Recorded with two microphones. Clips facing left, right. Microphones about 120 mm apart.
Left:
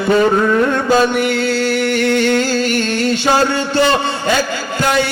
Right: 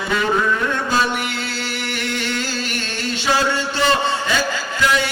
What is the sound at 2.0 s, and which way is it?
Music, 55° left (ahead or behind).